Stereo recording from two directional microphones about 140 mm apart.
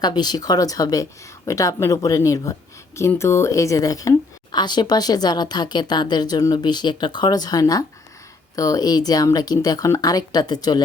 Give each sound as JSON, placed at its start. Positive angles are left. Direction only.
{"t": 0.0, "sound": "a woman's voice", "side_deg": 30}